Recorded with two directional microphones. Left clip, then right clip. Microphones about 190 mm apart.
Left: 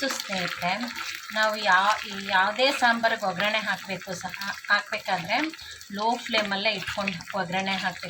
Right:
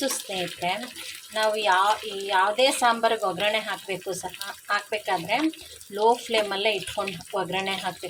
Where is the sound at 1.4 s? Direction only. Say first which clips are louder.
Even; 25° right (ahead or behind).